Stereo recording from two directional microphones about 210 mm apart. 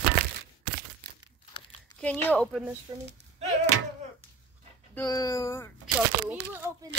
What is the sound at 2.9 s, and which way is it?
Speech, 20° right (ahead or behind).